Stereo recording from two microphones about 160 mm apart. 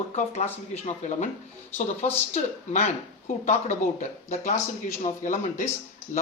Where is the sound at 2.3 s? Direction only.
45° left (ahead or behind).